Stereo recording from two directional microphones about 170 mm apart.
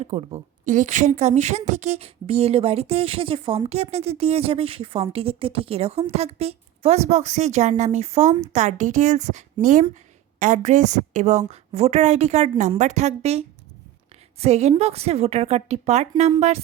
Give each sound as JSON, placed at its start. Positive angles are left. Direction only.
{"t": 0.0, "sound": "speech", "side_deg": -35}
{"t": 0.6, "sound": "a woman's voice", "side_deg": -50}